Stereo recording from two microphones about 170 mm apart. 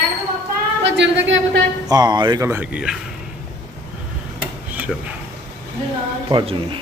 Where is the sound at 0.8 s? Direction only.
90° right.